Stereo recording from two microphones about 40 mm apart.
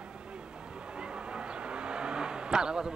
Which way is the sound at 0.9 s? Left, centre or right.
Right.